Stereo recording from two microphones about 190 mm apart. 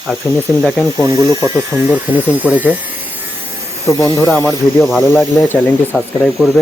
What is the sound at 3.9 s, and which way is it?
Speech, 15° left (ahead or behind).